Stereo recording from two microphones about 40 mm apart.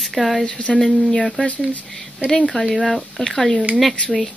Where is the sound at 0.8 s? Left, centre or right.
Centre.